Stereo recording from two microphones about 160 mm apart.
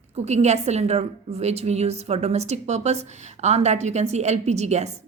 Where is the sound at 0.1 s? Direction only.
45° right (ahead or behind).